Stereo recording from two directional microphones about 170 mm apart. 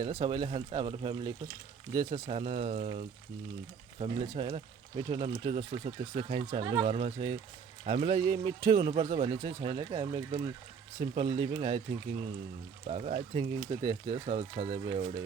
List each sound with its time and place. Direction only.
0.1 s speech: 25° right (ahead or behind)
2.2 s a man's voice: 40° right (ahead or behind)
4.0 s a man's voice: 35° right (ahead or behind)
12.9 s a man's voice: 40° right (ahead or behind)
13.7 s a man's voice: 30° right (ahead or behind)